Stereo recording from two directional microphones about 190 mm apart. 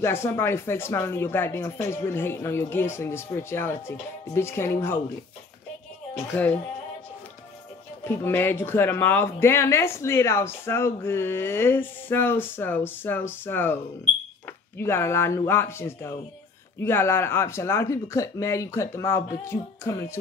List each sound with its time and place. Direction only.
0.0 s speech: 10° left (ahead or behind)
6.1 s speech: 10° left (ahead or behind)
8.0 s speech: 10° left (ahead or behind)
14.8 s speech: 15° left (ahead or behind)